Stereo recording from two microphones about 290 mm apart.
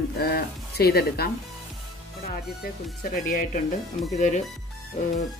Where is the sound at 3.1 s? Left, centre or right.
Left.